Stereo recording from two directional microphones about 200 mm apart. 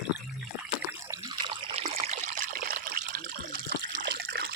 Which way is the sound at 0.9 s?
15° right (ahead or behind).